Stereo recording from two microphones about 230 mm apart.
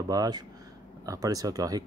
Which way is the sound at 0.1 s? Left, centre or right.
Centre.